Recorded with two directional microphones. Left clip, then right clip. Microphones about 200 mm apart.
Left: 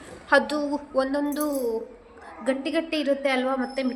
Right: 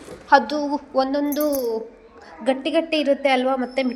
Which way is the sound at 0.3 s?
5° left (ahead or behind).